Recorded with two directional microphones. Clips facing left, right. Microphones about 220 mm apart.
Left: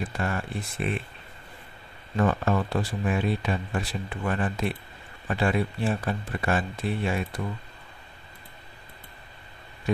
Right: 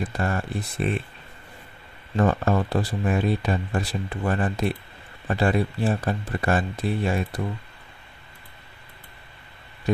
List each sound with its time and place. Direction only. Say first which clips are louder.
0.2 s speech: right 3 dB; 40° right (ahead or behind)
2.1 s speech: right 3 dB; 40° right (ahead or behind)